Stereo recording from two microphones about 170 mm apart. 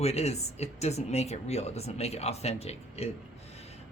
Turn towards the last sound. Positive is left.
turn(degrees=40)  # may be behind; listen again after turning